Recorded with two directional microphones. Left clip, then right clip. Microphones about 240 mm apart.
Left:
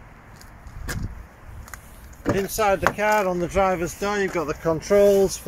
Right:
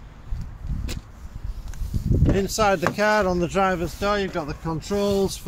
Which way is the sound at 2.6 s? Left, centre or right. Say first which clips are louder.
Even; centre.